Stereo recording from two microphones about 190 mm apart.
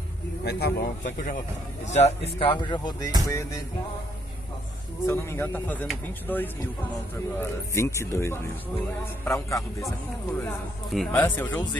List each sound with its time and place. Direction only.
0.4 s speech: 60° left (ahead or behind)
1.9 s speech: 35° left (ahead or behind); by 3.6 s 15° left (ahead or behind)
5.0 s speech: 15° left (ahead or behind)
10.9 s speech: 5° left (ahead or behind)